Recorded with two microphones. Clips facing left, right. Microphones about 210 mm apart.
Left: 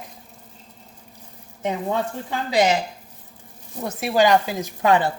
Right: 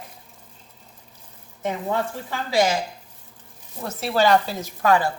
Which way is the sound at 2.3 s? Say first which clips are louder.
Left 2 dB; 20° left (ahead or behind).